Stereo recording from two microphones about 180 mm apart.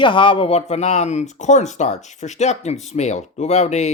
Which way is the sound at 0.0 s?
25° left (ahead or behind).